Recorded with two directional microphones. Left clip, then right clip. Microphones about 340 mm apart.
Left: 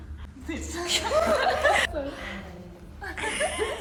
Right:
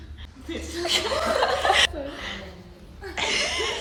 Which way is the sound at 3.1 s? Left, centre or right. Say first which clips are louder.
Right 4 dB; centre.